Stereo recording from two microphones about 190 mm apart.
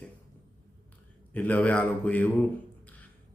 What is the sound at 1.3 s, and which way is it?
Speech, 10° left (ahead or behind).